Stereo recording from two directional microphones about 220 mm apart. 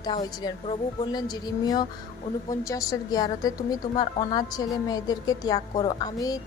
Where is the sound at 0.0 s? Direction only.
20° left (ahead or behind).